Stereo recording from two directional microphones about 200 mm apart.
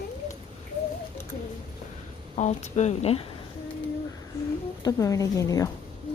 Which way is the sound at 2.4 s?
35° left (ahead or behind).